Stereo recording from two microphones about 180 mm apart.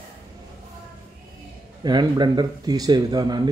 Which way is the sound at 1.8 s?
25° right (ahead or behind).